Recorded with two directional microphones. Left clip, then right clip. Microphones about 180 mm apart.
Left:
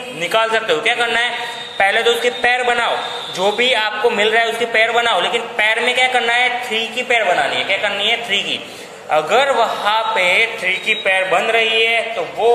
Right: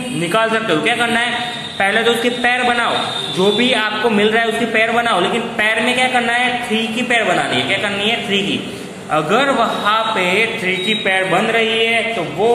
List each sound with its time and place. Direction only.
0.3 s a man's voice: 15° left (ahead or behind)